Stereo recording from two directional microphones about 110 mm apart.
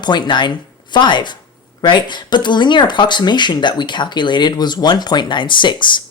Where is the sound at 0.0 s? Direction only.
40° left (ahead or behind).